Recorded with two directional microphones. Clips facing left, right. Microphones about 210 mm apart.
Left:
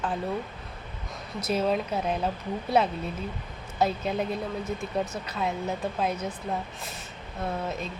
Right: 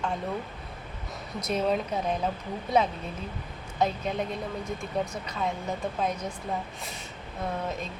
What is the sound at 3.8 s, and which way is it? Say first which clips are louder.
Speech: left 1 dB; 5° left (ahead or behind).